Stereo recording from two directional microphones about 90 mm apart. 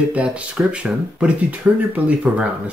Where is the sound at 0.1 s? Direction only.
15° right (ahead or behind).